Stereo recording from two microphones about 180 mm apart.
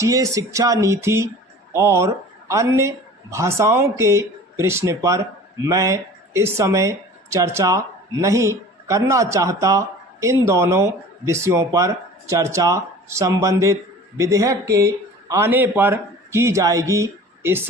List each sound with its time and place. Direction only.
0.0 s speech: 20° right (ahead or behind)